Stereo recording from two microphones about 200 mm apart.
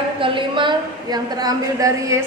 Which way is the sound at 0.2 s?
25° right (ahead or behind).